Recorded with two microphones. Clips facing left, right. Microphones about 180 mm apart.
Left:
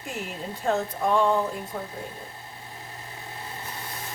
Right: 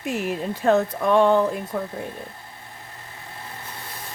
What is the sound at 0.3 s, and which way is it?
Speech, 70° right (ahead or behind).